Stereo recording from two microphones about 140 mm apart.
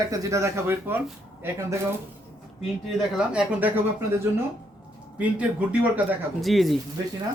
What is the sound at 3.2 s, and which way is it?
Speech, 10° right (ahead or behind).